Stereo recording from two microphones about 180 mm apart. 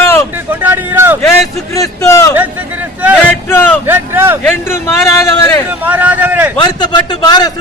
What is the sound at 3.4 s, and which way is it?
Speech, 10° left (ahead or behind).